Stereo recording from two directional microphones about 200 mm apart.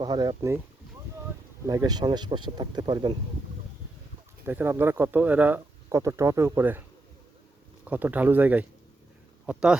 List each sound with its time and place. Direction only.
0.0 s speech: 20° right (ahead or behind)
1.6 s speech: 20° right (ahead or behind)
4.4 s speech: 10° right (ahead or behind)
7.9 s a man's voice: 10° right (ahead or behind)